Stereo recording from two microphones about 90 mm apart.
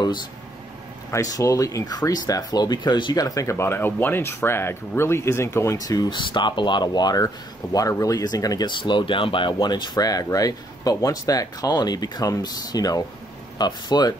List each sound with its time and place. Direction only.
1.1 s speech: 40° left (ahead or behind)
6.0 s speech: 60° left (ahead or behind)
8.6 s speech: 60° left (ahead or behind)